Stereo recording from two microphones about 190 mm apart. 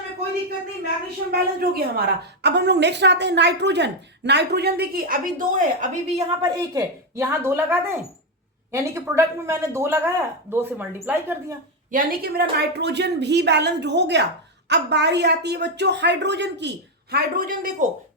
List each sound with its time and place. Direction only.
1.5 s a woman's voice: 55° right (ahead or behind)
6.1 s speech: 15° right (ahead or behind)
11.9 s a woman's voice: 50° right (ahead or behind)